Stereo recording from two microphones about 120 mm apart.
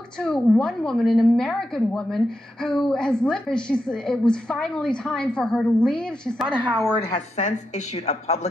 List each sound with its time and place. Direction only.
0.2 s a woman's voice: 5° left (ahead or behind)
6.5 s speech: 10° right (ahead or behind)
7.1 s a woman's voice: 75° left (ahead or behind)